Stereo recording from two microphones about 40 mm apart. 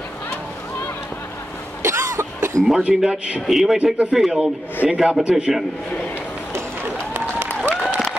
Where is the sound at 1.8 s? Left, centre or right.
Right.